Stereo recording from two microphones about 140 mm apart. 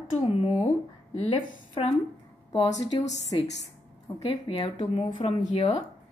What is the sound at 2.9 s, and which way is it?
Speech, 40° left (ahead or behind).